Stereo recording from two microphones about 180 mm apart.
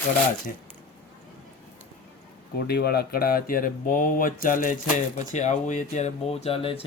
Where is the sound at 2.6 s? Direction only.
65° left (ahead or behind); by 6.8 s 30° left (ahead or behind).